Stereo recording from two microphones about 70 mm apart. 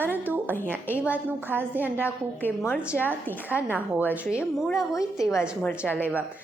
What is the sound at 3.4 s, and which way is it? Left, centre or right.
Speech, right.